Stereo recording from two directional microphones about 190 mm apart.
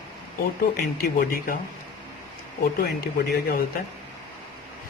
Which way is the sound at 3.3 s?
55° left (ahead or behind).